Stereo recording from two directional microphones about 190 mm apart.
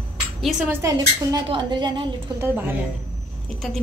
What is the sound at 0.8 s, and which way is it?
A woman's voice, 20° right (ahead or behind).